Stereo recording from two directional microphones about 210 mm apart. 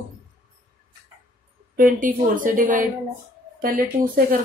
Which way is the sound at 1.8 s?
40° right (ahead or behind).